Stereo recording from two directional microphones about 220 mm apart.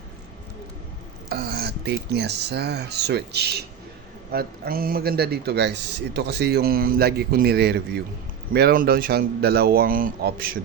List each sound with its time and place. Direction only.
1.3 s a man's voice: 45° right (ahead or behind)